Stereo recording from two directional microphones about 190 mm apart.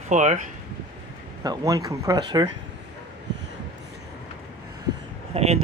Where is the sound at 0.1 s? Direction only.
40° right (ahead or behind).